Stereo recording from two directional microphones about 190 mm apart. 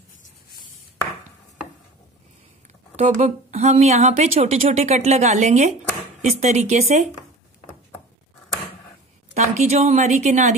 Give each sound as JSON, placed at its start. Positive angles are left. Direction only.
{"t": 3.0, "sound": "speech", "side_deg": -35}
{"t": 9.3, "sound": "speech", "side_deg": -35}